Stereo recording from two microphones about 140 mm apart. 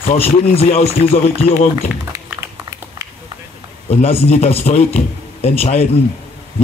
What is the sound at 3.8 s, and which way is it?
A man's voice, 45° left (ahead or behind).